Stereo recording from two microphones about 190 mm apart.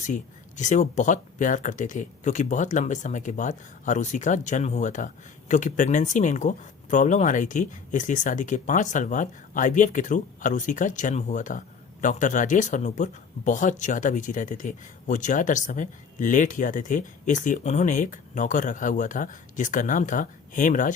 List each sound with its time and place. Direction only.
0.0 s speech: 40° left (ahead or behind)